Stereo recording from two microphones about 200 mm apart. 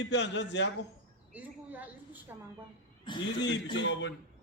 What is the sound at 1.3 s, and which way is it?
A woman's voice, 10° right (ahead or behind).